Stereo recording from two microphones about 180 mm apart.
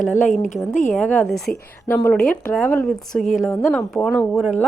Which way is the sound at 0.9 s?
10° left (ahead or behind).